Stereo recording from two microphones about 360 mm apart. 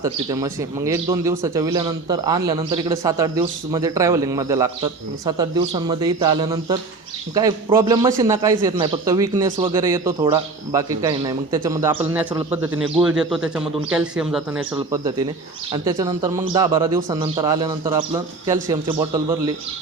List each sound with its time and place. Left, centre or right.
0.0 s speech: centre